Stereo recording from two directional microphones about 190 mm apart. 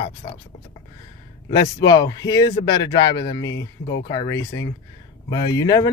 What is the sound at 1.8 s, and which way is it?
Speech, 20° left (ahead or behind).